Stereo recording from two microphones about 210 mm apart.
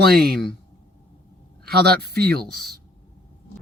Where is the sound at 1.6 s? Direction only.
50° right (ahead or behind).